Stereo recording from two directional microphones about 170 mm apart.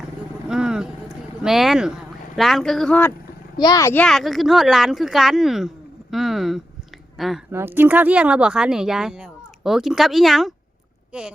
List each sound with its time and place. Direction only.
0.4 s vehicle: 5° right (ahead or behind)
2.3 s speech: centre (ahead or behind)
3.6 s a child's voice: 20° left (ahead or behind)
4.0 s speech: centre (ahead or behind)
7.5 s speech: 10° right (ahead or behind)